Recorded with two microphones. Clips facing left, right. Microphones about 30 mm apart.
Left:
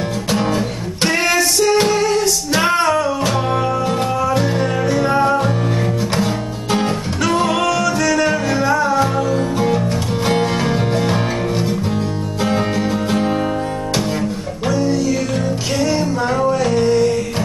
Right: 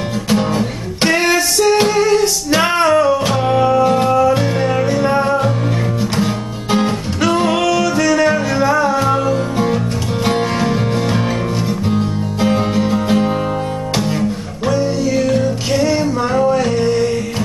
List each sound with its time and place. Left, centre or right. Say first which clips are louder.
0.3 s music: right 3 dB; centre
10.2 s music: right 1 dB; centre
12.7 s music: right 3 dB; centre
14.7 s music: right 1 dB; right
15.1 s music: right 4 dB; centre